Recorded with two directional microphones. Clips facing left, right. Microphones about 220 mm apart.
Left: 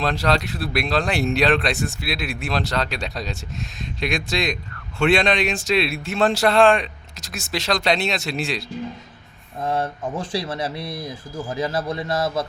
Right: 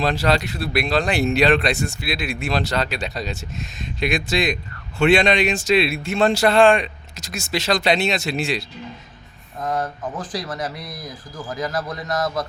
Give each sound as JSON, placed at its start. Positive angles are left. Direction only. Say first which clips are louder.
{"t": 0.0, "sound": "speech", "louder": "right 2 dB", "side_deg": 0}
{"t": 9.6, "sound": "speech", "louder": "left 1 dB", "side_deg": 25}